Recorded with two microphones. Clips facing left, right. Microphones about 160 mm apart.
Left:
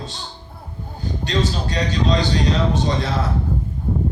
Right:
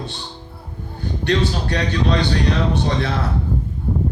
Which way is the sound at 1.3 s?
60° right (ahead or behind).